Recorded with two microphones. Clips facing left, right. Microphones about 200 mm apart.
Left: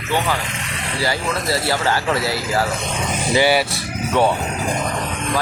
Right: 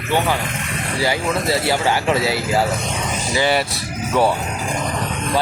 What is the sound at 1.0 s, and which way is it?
Speech, 20° right (ahead or behind).